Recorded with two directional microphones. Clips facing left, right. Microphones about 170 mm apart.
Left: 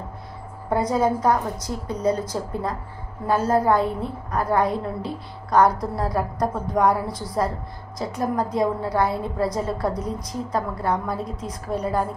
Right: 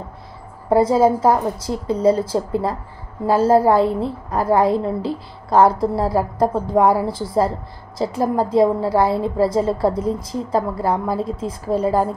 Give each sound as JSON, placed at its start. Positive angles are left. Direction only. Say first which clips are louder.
{"t": 0.7, "sound": "a woman's voice", "louder": "right 7 dB", "side_deg": -25}